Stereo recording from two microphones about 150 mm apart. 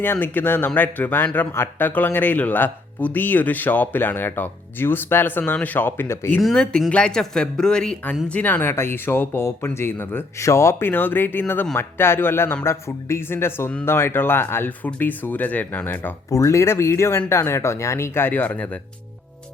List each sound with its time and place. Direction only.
0.0 s speech: 10° left (ahead or behind)
6.4 s speech: 5° left (ahead or behind)